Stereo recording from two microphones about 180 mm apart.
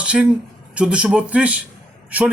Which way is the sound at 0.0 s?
5° right (ahead or behind).